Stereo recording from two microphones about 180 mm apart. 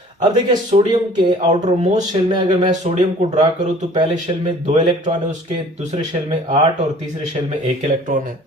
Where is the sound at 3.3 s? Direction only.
40° right (ahead or behind).